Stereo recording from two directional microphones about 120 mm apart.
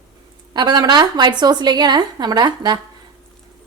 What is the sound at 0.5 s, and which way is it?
A woman's voice, 35° right (ahead or behind).